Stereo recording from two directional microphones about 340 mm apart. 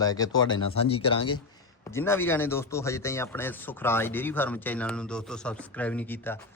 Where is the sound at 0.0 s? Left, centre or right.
Centre.